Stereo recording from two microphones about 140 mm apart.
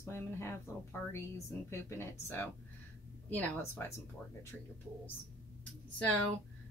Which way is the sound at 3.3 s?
10° left (ahead or behind).